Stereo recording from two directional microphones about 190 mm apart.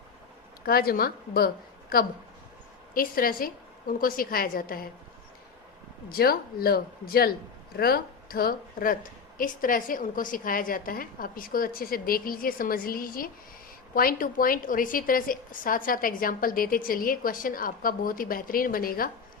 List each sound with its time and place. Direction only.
0.6 s a woman's voice: 50° left (ahead or behind)
6.1 s a woman's voice: 50° left (ahead or behind)